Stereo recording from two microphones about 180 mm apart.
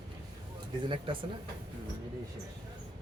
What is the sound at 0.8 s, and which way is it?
Speech, 30° right (ahead or behind).